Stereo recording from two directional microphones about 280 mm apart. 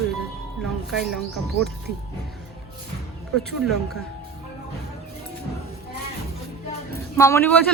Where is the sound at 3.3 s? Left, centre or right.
Centre.